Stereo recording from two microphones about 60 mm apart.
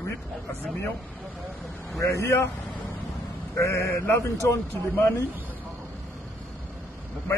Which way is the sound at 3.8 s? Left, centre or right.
Left.